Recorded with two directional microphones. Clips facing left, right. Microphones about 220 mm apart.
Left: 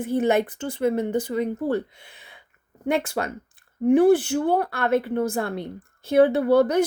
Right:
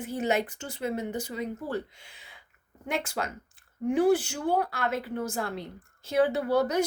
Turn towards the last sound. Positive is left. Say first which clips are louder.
# left 7 dB
turn(degrees=60)  # may be behind; listen again after turning